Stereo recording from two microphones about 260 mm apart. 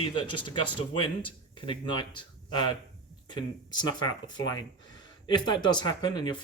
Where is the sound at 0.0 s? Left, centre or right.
Centre.